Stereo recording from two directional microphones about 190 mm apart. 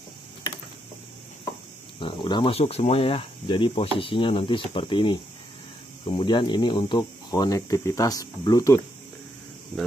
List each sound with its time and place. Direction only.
2.0 s speech: 25° left (ahead or behind)